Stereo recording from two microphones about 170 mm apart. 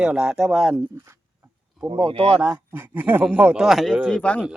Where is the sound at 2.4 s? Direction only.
10° right (ahead or behind); by 4.4 s 5° left (ahead or behind).